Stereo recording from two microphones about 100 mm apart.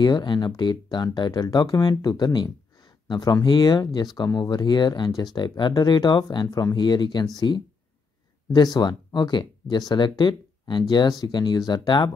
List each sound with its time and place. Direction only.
0.0 s speech: 50° left (ahead or behind)
8.7 s speech: 45° left (ahead or behind)